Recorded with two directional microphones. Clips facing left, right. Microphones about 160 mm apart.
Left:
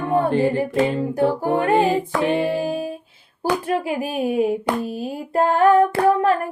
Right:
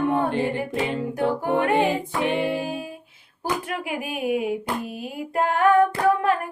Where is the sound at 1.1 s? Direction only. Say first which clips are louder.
Left 1 dB; 35° left (ahead or behind).